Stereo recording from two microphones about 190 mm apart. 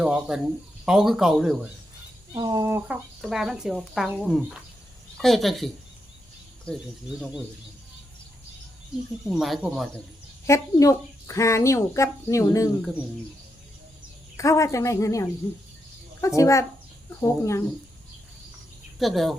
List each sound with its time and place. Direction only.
0.0 s speech: 5° right (ahead or behind)
2.3 s speech: 20° right (ahead or behind); by 5.7 s centre (ahead or behind)
9.3 s speech: centre (ahead or behind)
10.4 s speech: 15° left (ahead or behind)
14.3 s speech: 15° left (ahead or behind)
18.9 s speech: centre (ahead or behind)